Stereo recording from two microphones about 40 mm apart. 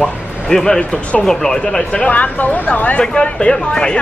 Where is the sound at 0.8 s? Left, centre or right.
Left.